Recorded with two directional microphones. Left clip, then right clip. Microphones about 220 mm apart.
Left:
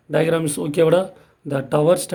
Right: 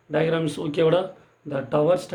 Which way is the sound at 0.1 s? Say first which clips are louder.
Left 4 dB; 45° left (ahead or behind).